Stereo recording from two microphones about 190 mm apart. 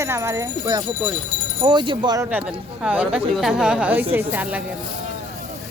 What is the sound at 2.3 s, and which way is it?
Speech, 5° right (ahead or behind).